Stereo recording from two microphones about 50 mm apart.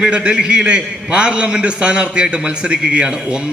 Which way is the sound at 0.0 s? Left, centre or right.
Right.